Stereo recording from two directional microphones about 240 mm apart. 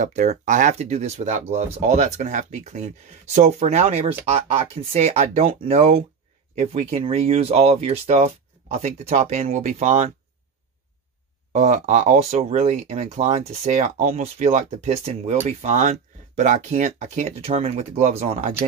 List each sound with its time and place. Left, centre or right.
0.0 s speech: right
11.5 s speech: right